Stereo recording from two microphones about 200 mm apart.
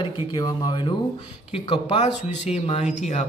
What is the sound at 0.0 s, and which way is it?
Speech, 25° left (ahead or behind).